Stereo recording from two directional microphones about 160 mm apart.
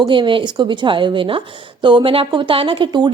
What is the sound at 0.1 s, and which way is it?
Speech, 30° right (ahead or behind).